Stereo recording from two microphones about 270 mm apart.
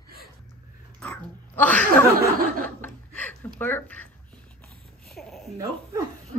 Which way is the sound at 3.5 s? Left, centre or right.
Centre.